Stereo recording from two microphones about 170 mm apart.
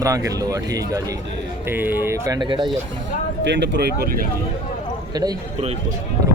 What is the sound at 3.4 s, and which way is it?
Speech, 90° right.